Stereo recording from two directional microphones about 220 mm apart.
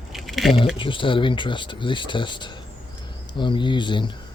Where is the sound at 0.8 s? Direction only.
25° left (ahead or behind).